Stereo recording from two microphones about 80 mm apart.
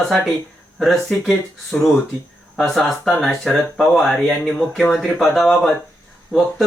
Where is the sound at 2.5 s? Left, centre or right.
Centre.